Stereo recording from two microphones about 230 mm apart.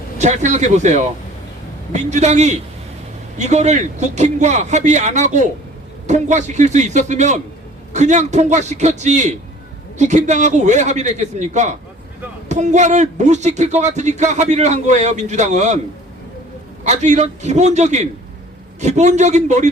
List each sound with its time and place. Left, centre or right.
0.2 s speech: right
16.8 s speech: right